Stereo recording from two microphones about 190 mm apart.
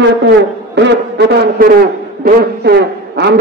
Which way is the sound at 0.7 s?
65° right (ahead or behind).